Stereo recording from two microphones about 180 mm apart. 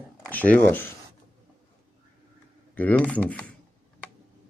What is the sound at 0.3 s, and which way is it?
Speech, 10° left (ahead or behind).